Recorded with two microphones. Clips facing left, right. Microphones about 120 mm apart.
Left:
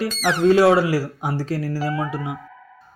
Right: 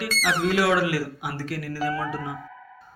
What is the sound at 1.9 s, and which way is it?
Speech, 20° left (ahead or behind).